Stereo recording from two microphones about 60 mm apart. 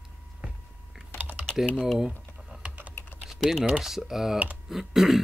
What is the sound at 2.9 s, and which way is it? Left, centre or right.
Typing, left.